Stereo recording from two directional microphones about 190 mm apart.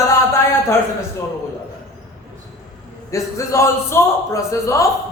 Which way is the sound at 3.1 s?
15° left (ahead or behind).